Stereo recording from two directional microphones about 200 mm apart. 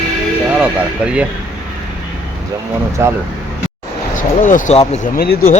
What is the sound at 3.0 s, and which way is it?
Speech, 15° right (ahead or behind).